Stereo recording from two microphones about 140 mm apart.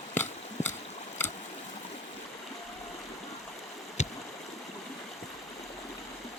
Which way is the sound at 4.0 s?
55° left (ahead or behind).